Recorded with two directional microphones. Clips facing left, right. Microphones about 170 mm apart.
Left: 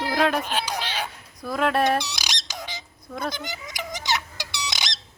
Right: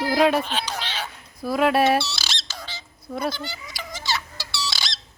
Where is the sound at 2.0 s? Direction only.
15° left (ahead or behind).